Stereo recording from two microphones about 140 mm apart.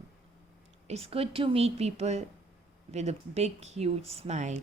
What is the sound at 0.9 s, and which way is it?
Speech, 45° right (ahead or behind).